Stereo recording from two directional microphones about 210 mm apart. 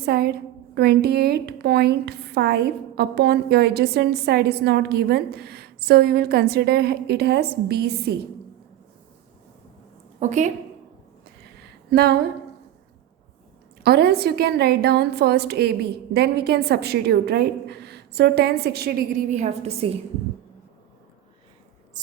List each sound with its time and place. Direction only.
0.0 s a woman's voice: 50° right (ahead or behind)
10.2 s a woman's voice: 35° right (ahead or behind)
11.9 s a woman's voice: 50° right (ahead or behind)
13.8 s a woman's voice: 50° right (ahead or behind)
19.3 s a woman's voice: 30° right (ahead or behind)